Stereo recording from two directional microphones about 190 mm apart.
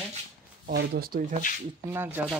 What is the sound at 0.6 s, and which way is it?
Speech, 55° right (ahead or behind).